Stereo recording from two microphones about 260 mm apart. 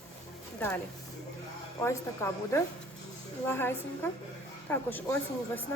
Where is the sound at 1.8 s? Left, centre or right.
Centre.